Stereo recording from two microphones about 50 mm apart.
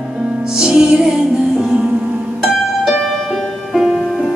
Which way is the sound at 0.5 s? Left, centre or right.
Centre.